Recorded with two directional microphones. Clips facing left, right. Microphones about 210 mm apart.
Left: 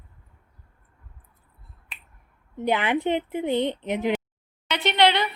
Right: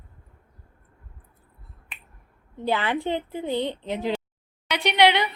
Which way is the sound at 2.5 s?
20° left (ahead or behind).